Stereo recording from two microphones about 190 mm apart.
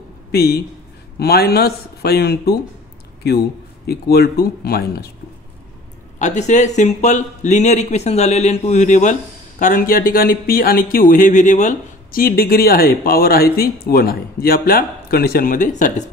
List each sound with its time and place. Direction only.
0.3 s speech: 55° left (ahead or behind)
6.1 s speech: 40° left (ahead or behind)